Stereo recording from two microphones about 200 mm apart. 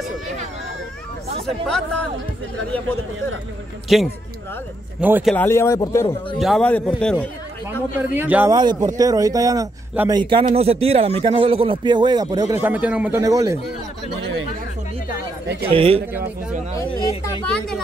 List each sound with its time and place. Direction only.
1.4 s a man's voice: 5° left (ahead or behind)
3.9 s a man's voice: centre (ahead or behind)
5.3 s a man's voice: 10° left (ahead or behind)
8.0 s a man's voice: 10° right (ahead or behind)
8.5 s speech: 20° right (ahead or behind)
15.7 s speech: 30° right (ahead or behind)
17.5 s a man's voice: 5° left (ahead or behind)